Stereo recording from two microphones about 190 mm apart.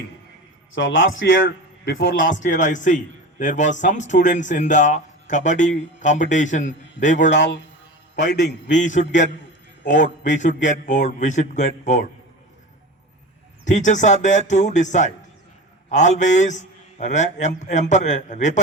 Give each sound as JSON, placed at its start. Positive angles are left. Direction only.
{"t": 0.7, "sound": "a man's voice", "side_deg": 85}
{"t": 1.5, "sound": "a man's voice", "side_deg": 65}
{"t": 2.1, "sound": "speech", "side_deg": 40}
{"t": 7.3, "sound": "a man's voice", "side_deg": 70}
{"t": 8.7, "sound": "speech", "side_deg": 40}
{"t": 10.4, "sound": "speech", "side_deg": 40}
{"t": 13.7, "sound": "speech", "side_deg": 40}